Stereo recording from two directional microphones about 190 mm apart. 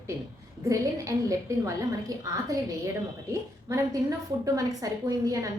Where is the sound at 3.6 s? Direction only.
15° right (ahead or behind).